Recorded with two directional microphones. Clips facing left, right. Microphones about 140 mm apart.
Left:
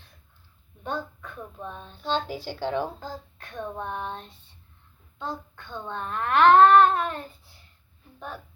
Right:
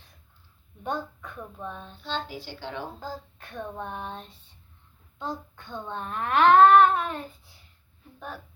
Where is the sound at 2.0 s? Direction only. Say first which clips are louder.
Left 6 dB; 40° left (ahead or behind).